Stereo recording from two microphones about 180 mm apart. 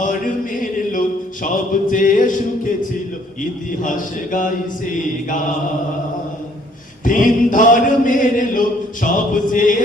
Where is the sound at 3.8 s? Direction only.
45° left (ahead or behind).